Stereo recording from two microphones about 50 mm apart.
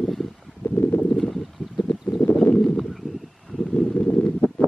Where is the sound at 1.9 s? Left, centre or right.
Centre.